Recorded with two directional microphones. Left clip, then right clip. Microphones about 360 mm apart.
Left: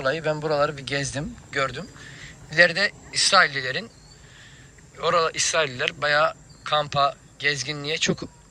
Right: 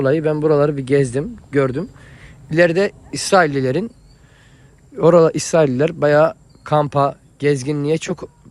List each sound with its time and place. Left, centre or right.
0.0 s a man's voice: right
4.9 s speech: centre